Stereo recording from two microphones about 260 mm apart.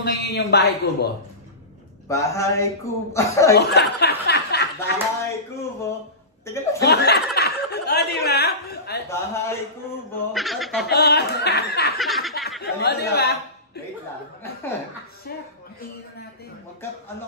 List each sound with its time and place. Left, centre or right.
0.0 s speech: left
2.0 s a man's voice: centre
3.5 s speech: left
6.4 s a man's voice: centre
6.8 s speech: left
7.3 s chuckle: left
9.1 s a man's voice: centre
10.3 s speech: centre
10.9 s speech: left
12.0 s a sound: centre
12.6 s speech: left